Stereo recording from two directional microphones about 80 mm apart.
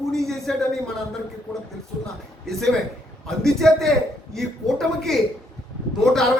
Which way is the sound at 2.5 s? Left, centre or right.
Centre.